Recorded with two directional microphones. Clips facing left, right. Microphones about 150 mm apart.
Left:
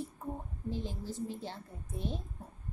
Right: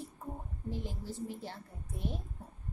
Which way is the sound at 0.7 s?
25° left (ahead or behind).